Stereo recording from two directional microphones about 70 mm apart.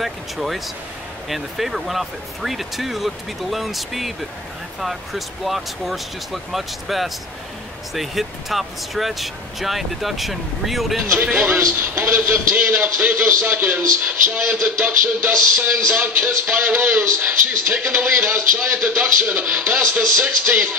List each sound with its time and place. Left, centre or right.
0.0 s speech: centre
11.3 s a man's voice: right